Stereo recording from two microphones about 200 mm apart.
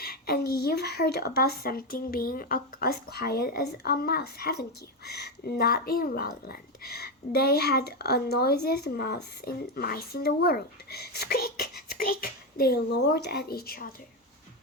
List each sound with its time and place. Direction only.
0.0 s a woman's voice: 50° left (ahead or behind)